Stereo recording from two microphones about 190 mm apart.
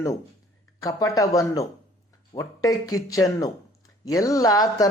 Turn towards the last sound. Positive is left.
turn(degrees=20)  # may be behind; listen again after turning